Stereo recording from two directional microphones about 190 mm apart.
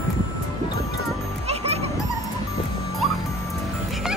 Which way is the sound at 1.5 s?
35° right (ahead or behind).